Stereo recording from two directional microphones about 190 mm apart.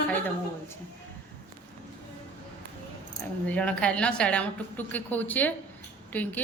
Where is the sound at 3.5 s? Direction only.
5° left (ahead or behind).